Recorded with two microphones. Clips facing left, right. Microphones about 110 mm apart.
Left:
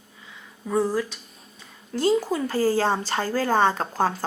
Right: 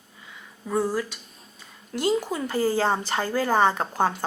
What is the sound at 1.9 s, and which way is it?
A woman's voice, 15° right (ahead or behind).